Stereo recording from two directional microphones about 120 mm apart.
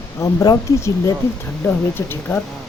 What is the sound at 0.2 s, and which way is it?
Speech, 25° left (ahead or behind).